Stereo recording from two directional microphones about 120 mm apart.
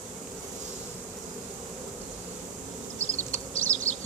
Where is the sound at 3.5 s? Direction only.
10° left (ahead or behind).